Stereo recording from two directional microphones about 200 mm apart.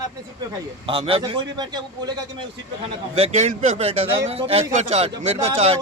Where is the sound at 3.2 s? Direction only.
30° right (ahead or behind).